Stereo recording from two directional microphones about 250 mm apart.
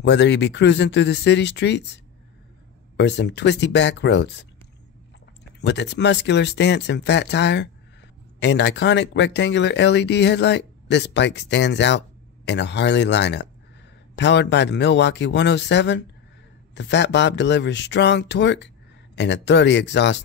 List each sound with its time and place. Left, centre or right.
0.0 s speech: left
3.0 s speech: left
5.6 s speech: left